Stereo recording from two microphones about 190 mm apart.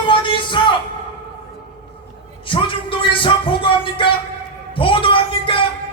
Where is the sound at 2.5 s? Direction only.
25° left (ahead or behind).